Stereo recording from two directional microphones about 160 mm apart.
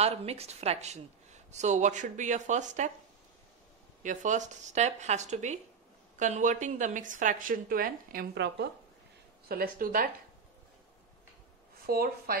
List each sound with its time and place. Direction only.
0.0 s a woman's voice: 40° right (ahead or behind)
4.0 s a woman's voice: 50° right (ahead or behind); by 8.6 s 80° right
9.5 s a woman's voice: 65° right (ahead or behind)
11.8 s speech: 70° right (ahead or behind)